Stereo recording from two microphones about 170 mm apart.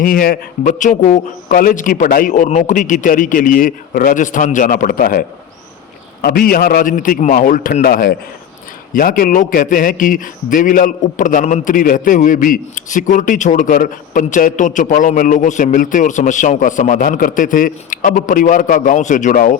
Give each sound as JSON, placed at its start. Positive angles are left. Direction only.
{"t": 0.0, "sound": "a man's voice", "side_deg": 55}
{"t": 6.2, "sound": "a man's voice", "side_deg": 60}